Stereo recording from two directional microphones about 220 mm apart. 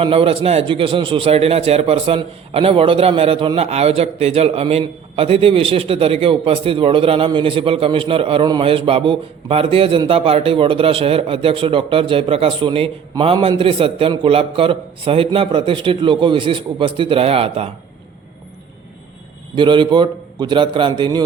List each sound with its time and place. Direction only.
0.0 s a man's voice: 25° right (ahead or behind)
19.5 s a man's voice: 20° right (ahead or behind)